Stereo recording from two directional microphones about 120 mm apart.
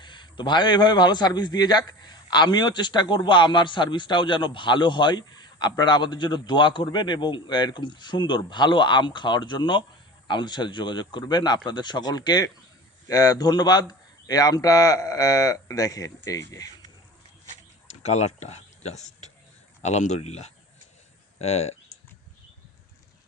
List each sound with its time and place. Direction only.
0.0 s a man's voice: 40° left (ahead or behind)
17.8 s a man's voice: 70° left (ahead or behind)